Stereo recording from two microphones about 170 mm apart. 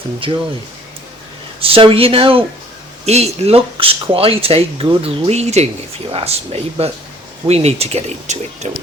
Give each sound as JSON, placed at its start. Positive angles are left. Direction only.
{"t": 0.2, "sound": "speech", "side_deg": -30}
{"t": 1.6, "sound": "speech", "side_deg": -30}